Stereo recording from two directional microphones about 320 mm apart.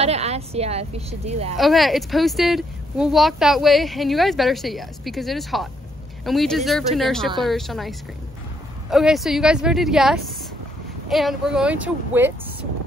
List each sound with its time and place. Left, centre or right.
0.0 s a woman's voice: centre
1.6 s a woman's voice: centre
8.9 s a woman's voice: centre